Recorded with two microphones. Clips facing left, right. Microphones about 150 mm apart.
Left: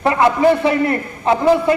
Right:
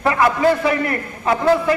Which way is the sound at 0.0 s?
25° left (ahead or behind).